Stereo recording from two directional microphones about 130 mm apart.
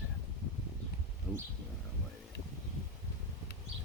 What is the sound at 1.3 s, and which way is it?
Speech, centre (ahead or behind).